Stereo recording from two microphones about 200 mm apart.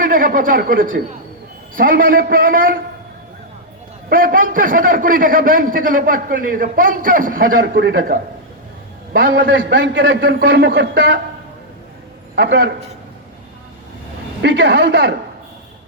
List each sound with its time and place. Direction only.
0.0 s a man's voice: 45° right (ahead or behind)
4.1 s a man's voice: 45° right (ahead or behind); by 11.2 s 60° right (ahead or behind)
12.4 s a man's voice: 60° right (ahead or behind)
14.4 s a man's voice: 60° right (ahead or behind)